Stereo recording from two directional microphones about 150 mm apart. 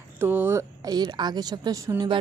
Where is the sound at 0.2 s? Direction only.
15° right (ahead or behind).